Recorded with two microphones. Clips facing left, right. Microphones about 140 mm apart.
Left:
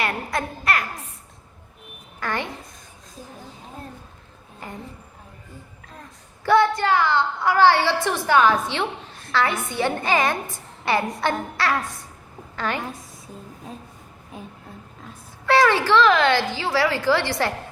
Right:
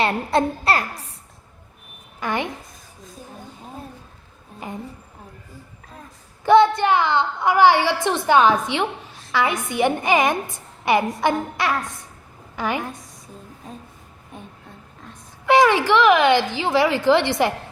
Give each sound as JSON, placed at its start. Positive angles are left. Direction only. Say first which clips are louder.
{"t": 0.0, "sound": "a woman's voice", "louder": "right 6 dB", "side_deg": -30}
{"t": 2.2, "sound": "a woman's voice", "louder": "right 3 dB", "side_deg": -15}
{"t": 4.6, "sound": "a woman's voice", "louder": "right 4 dB", "side_deg": -15}
{"t": 6.4, "sound": "a woman's voice", "louder": "right 4 dB", "side_deg": -20}
{"t": 11.7, "sound": "a woman's voice", "louder": "even", "side_deg": 0}
{"t": 12.5, "sound": "a woman's voice", "louder": "right 2 dB", "side_deg": -15}
{"t": 12.8, "sound": "a sound", "louder": "right 1 dB", "side_deg": 0}
{"t": 14.3, "sound": "a woman's voice", "louder": "left 1 dB", "side_deg": 0}
{"t": 15.4, "sound": "a woman's voice", "louder": "right 2 dB", "side_deg": -15}